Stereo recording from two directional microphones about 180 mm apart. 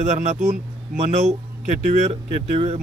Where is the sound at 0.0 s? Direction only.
45° right (ahead or behind).